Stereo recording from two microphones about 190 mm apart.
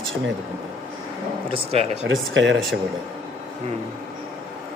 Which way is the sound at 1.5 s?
30° right (ahead or behind).